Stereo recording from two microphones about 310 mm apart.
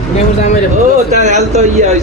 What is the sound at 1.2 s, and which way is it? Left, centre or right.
Speech, right.